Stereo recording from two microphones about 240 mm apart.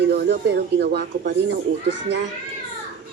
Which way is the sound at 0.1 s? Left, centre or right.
Right.